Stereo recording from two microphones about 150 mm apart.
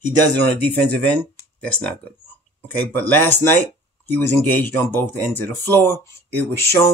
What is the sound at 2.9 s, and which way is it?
Speech, 10° left (ahead or behind).